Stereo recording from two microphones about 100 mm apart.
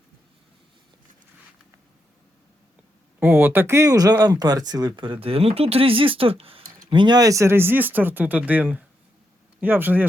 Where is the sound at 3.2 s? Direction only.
15° right (ahead or behind); by 7.1 s 55° right (ahead or behind).